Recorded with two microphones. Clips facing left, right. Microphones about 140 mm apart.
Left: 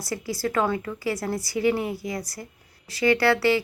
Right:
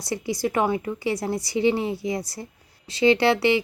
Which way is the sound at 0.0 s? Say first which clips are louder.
Right 2 dB; 20° right (ahead or behind).